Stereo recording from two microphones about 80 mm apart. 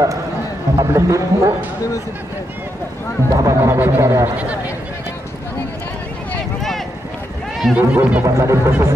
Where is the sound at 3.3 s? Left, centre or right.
Right.